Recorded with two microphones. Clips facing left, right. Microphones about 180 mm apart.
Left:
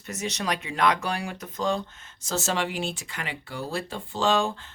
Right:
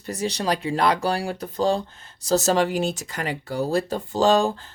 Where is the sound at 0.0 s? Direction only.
35° right (ahead or behind).